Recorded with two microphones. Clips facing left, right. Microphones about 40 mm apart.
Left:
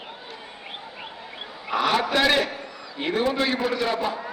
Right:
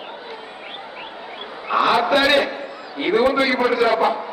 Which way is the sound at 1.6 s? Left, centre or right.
Centre.